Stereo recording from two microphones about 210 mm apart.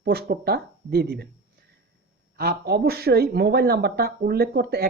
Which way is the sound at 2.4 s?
50° right (ahead or behind).